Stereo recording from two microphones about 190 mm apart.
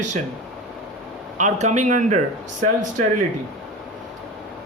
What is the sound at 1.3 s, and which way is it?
Speech, 40° right (ahead or behind).